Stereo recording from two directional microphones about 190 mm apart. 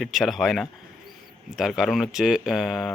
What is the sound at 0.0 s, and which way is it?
Speech, centre (ahead or behind).